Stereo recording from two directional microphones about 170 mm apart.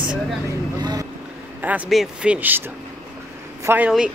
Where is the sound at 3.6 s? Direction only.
10° right (ahead or behind).